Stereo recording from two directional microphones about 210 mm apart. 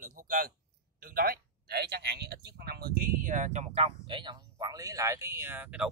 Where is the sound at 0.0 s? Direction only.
40° right (ahead or behind).